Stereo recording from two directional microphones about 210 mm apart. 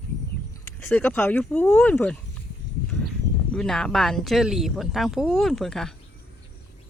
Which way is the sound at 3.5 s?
5° left (ahead or behind).